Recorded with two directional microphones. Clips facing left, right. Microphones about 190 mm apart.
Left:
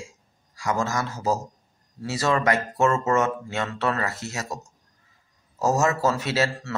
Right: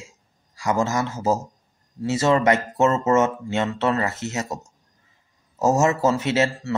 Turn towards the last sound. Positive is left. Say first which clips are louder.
# right 3 dB
turn(degrees=-20)  # may be behind; listen again after turning